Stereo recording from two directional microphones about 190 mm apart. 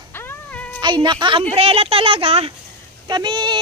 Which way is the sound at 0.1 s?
10° left (ahead or behind).